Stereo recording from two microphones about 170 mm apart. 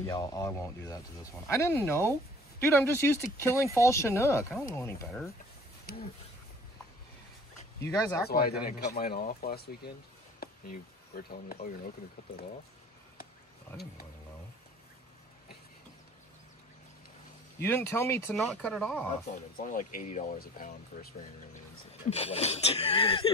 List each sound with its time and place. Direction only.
0.0 s speech: 20° left (ahead or behind)
5.9 s speech: 60° left (ahead or behind)
7.8 s speech: 20° left (ahead or behind)
8.3 s speech: 60° left (ahead or behind)
10.4 s a sound: 60° left (ahead or behind)
17.6 s speech: 15° left (ahead or behind)
18.3 s speech: 5° left (ahead or behind)
19.5 s speech: 50° left (ahead or behind)
20.3 s speech: 60° left (ahead or behind)
22.1 s speech: 35° left (ahead or behind)